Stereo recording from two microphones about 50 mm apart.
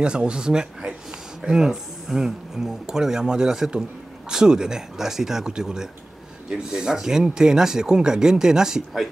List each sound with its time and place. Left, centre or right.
0.0 s speech: centre